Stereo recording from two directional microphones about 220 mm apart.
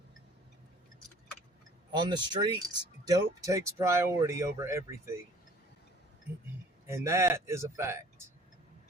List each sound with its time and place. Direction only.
2.0 s speech: 20° right (ahead or behind)
6.8 s speech: 10° right (ahead or behind)